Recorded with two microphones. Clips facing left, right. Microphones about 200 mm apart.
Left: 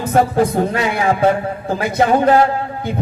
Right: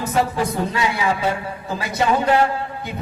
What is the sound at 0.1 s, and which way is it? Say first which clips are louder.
A man's voice: left 8 dB; 50° left (ahead or behind).